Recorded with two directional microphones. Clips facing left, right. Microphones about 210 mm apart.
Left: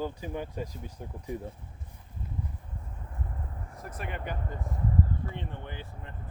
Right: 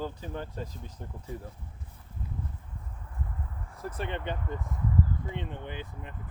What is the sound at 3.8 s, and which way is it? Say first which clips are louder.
Speech: right 4 dB; 30° right (ahead or behind).